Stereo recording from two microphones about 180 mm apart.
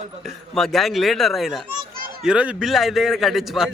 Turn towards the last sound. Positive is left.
turn(degrees=0)  # may be behind; listen again after turning